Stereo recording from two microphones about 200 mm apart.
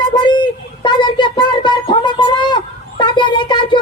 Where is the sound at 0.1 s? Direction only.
25° left (ahead or behind).